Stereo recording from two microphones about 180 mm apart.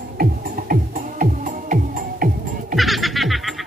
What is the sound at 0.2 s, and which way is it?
Music, 55° right (ahead or behind).